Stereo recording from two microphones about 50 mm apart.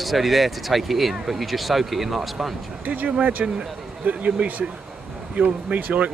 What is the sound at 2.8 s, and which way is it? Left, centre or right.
Speech, right.